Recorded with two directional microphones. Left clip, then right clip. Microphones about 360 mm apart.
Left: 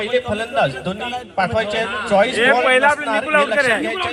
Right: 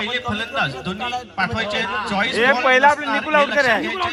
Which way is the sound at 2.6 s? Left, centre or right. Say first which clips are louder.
Even; right.